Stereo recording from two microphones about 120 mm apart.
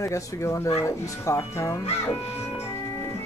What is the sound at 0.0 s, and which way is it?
Speech, 25° left (ahead or behind).